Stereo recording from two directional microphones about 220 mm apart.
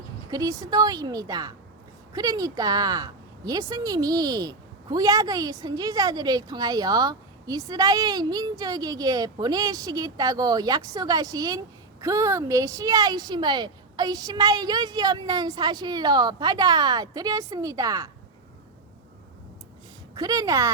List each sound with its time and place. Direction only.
0.3 s a woman's voice: 15° right (ahead or behind)
20.1 s a woman's voice: 15° right (ahead or behind)